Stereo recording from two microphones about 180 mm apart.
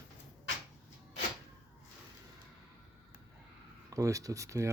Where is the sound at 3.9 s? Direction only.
20° right (ahead or behind).